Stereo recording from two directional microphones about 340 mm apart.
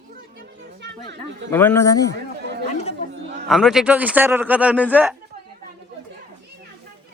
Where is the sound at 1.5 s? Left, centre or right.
Centre.